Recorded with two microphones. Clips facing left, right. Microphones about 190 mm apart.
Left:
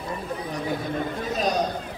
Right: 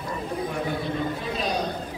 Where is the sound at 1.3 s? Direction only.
45° left (ahead or behind).